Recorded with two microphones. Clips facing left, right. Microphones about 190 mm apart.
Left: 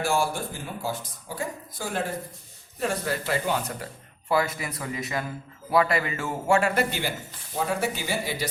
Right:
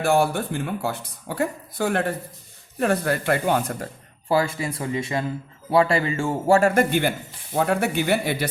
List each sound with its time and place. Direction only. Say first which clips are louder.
0.0 s speech: right 5 dB; 60° right (ahead or behind)
4.3 s speech: right 3 dB; 30° right (ahead or behind)
6.6 s speech: right 6 dB; 45° right (ahead or behind)
7.5 s speech: right 6 dB; 65° right (ahead or behind)